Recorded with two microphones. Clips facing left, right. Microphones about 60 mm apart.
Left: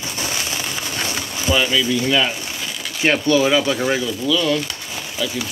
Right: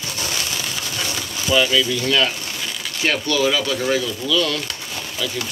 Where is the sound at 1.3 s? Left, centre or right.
Centre.